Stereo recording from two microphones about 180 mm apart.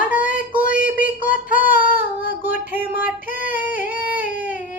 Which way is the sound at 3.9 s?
10° right (ahead or behind).